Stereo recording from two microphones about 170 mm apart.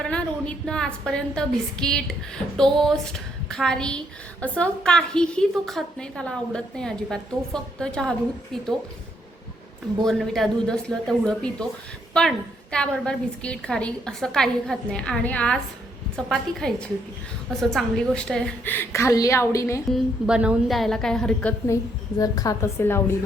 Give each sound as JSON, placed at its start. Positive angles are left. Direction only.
{"t": 0.0, "sound": "a woman's voice", "side_deg": 5}
{"t": 10.0, "sound": "a woman's voice", "side_deg": 0}
{"t": 19.9, "sound": "a woman's voice", "side_deg": -5}
{"t": 22.2, "sound": "a woman's voice", "side_deg": 20}